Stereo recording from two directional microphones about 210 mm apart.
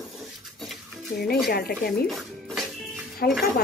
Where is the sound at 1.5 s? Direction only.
45° left (ahead or behind).